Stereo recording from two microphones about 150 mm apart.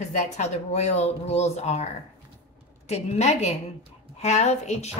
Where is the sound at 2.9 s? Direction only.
50° left (ahead or behind).